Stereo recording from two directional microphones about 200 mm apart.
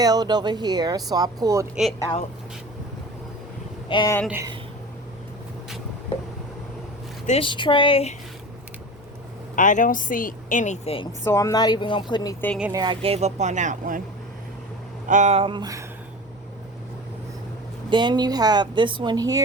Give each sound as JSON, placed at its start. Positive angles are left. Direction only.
{"t": 0.0, "sound": "a woman's voice", "side_deg": -20}
{"t": 1.7, "sound": "speech", "side_deg": 0}
{"t": 3.8, "sound": "speech", "side_deg": 25}
{"t": 4.3, "sound": "speech", "side_deg": -15}
{"t": 7.3, "sound": "speech", "side_deg": 25}
{"t": 9.6, "sound": "a woman's voice", "side_deg": 40}
{"t": 11.2, "sound": "speech", "side_deg": 15}
{"t": 12.7, "sound": "speech", "side_deg": -25}
{"t": 15.0, "sound": "speech", "side_deg": -40}
{"t": 17.8, "sound": "a woman's voice", "side_deg": -25}